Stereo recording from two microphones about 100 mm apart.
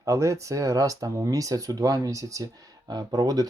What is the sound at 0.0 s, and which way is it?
Speech, 30° right (ahead or behind).